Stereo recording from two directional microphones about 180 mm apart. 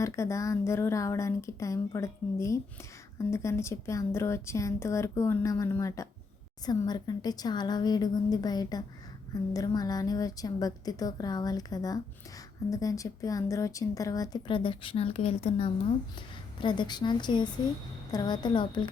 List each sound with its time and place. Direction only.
0.0 s a woman's voice: 15° left (ahead or behind)